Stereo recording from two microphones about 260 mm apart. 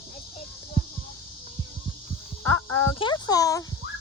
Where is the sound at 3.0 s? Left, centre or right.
Centre.